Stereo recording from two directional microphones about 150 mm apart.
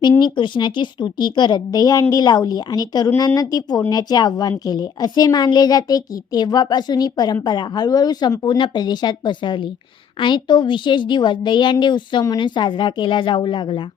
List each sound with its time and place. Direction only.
0.2 s a woman's voice: 30° left (ahead or behind)